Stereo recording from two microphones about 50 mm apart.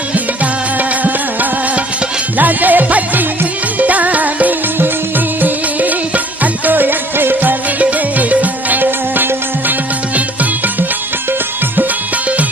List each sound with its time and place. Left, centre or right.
0.8 s music: right
7.8 s music: right